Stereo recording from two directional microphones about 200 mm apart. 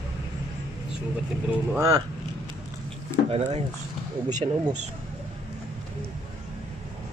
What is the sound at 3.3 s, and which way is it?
Speech, 30° right (ahead or behind).